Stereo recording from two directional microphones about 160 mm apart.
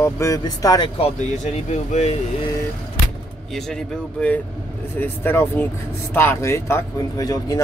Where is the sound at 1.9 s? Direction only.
40° left (ahead or behind).